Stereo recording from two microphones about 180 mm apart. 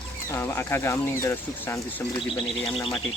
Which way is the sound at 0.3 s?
15° left (ahead or behind).